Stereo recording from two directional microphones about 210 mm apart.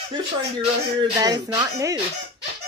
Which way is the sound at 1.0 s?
20° right (ahead or behind).